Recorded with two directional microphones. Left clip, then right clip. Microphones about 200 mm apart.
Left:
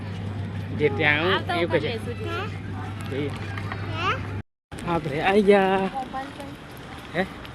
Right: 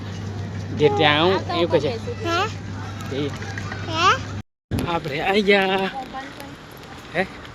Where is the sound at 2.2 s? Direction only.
45° right (ahead or behind).